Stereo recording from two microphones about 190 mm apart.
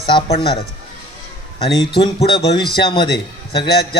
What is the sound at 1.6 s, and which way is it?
Speech, 25° left (ahead or behind).